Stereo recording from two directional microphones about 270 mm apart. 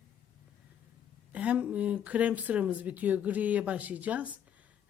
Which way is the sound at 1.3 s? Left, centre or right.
Centre.